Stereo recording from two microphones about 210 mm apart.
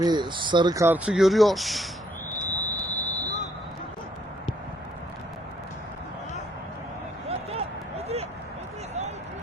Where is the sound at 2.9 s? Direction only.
10° left (ahead or behind).